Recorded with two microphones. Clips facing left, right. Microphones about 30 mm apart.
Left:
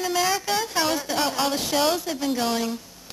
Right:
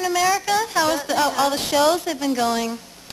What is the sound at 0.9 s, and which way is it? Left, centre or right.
Speech, centre.